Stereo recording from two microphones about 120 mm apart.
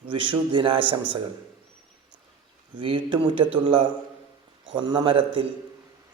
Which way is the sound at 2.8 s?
45° right (ahead or behind).